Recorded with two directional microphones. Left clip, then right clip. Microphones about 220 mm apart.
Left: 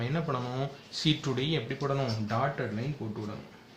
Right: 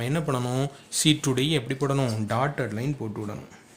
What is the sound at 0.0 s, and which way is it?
Speech, 50° right (ahead or behind).